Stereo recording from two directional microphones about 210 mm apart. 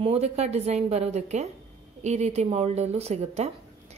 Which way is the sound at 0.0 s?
30° right (ahead or behind).